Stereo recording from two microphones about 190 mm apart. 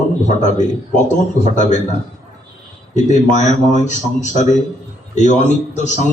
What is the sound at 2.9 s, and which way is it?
A man's voice, 40° left (ahead or behind).